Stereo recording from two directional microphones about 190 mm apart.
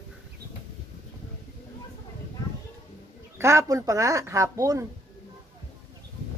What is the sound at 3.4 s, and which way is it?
Speech, 15° right (ahead or behind).